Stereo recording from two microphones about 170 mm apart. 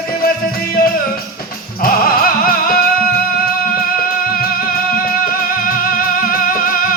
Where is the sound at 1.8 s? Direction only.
55° left (ahead or behind).